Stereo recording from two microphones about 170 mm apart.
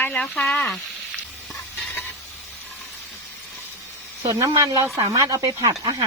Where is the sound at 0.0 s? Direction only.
10° left (ahead or behind).